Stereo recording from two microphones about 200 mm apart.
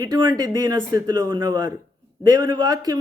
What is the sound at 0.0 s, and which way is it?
Speech, 20° right (ahead or behind).